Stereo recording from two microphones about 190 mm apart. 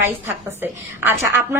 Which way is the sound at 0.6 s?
10° right (ahead or behind).